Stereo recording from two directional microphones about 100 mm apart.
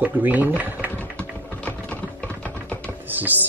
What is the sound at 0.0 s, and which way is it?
Speech, 15° right (ahead or behind).